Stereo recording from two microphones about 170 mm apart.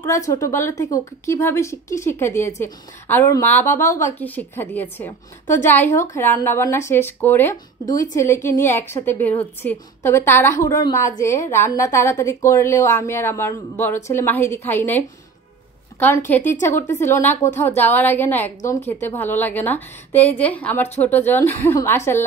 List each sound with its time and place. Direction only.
0.0 s a woman's voice: 15° left (ahead or behind)
16.0 s a woman's voice: 10° left (ahead or behind)